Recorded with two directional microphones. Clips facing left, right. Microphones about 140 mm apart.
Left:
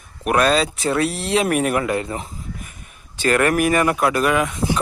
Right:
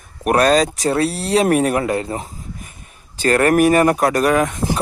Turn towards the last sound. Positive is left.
turn(degrees=-45)  # may be behind; listen again after turning